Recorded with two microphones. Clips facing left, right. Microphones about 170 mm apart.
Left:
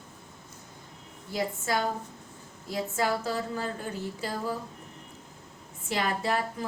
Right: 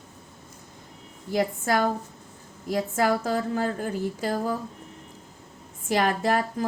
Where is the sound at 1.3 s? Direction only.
50° right (ahead or behind).